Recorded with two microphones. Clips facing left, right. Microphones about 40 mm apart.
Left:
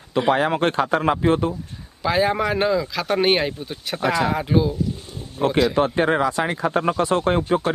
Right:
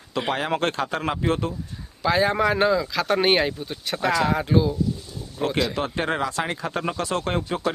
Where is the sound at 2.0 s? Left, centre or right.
Centre; by 7.4 s left.